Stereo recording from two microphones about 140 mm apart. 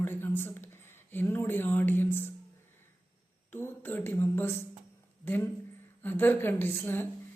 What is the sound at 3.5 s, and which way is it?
A man's voice, 15° left (ahead or behind).